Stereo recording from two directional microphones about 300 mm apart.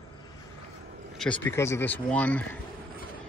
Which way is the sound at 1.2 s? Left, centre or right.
Centre.